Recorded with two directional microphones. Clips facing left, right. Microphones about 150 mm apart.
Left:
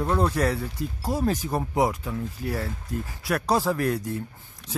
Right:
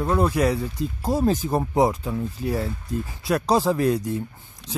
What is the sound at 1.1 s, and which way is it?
Speech, 25° right (ahead or behind).